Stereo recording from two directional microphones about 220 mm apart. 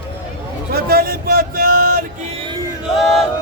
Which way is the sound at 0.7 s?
45° right (ahead or behind).